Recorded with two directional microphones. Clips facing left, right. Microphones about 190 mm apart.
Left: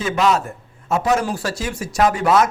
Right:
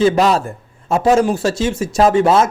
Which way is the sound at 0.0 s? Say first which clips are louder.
Right 5 dB; 35° right (ahead or behind).